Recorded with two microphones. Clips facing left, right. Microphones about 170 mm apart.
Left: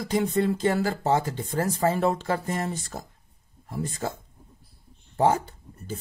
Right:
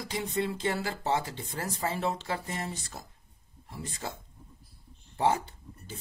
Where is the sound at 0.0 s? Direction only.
45° left (ahead or behind).